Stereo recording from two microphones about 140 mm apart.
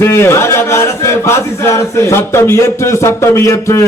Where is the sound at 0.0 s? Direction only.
15° left (ahead or behind).